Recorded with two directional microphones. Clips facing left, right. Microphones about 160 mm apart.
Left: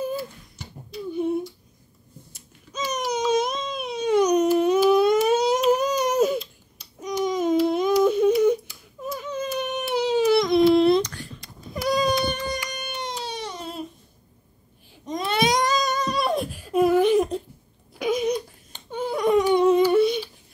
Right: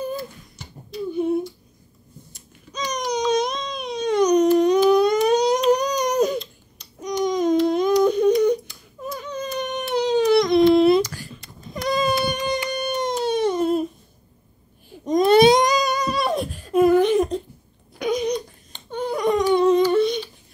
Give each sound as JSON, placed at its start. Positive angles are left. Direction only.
{"t": 0.0, "sound": "a sound", "side_deg": 10}
{"t": 2.3, "sound": "baby cry", "side_deg": 5}
{"t": 12.4, "sound": "music", "side_deg": -20}
{"t": 15.0, "sound": "baby cry", "side_deg": -40}
{"t": 15.5, "sound": "humming", "side_deg": -15}
{"t": 16.2, "sound": "a sound", "side_deg": 0}
{"t": 17.9, "sound": "crying", "side_deg": 5}
{"t": 19.4, "sound": "humming", "side_deg": 10}